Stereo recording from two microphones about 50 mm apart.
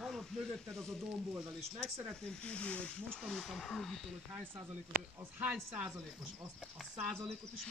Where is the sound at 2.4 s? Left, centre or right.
Left.